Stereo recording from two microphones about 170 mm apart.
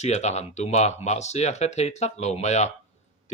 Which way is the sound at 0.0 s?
40° left (ahead or behind).